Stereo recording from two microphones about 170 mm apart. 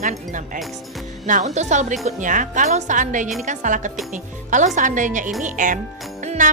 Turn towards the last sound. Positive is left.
turn(degrees=-50)  # may be behind; listen again after turning